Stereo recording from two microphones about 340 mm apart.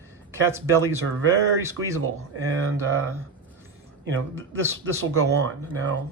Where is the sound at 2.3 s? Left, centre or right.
Right.